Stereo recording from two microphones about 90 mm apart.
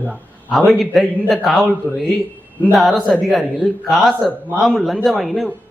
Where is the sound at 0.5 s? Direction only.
Centre (ahead or behind).